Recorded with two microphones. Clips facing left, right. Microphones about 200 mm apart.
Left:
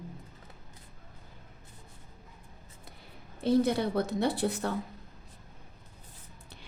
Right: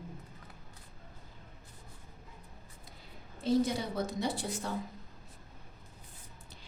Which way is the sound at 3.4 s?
60° left (ahead or behind).